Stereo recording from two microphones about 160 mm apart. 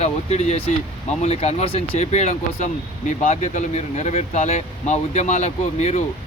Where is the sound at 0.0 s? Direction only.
45° left (ahead or behind).